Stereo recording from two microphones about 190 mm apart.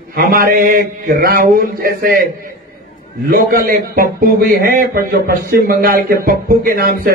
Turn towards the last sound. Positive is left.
turn(degrees=-50)  # may be behind; listen again after turning